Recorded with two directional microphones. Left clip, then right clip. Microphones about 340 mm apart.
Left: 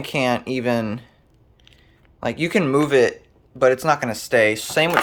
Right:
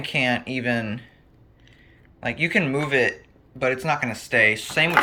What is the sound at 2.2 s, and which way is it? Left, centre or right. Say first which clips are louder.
Speech: left 2 dB; centre.